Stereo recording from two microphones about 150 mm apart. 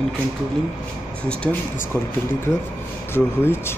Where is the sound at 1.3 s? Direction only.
5° left (ahead or behind).